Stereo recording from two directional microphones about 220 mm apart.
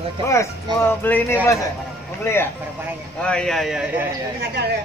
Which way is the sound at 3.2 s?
5° left (ahead or behind).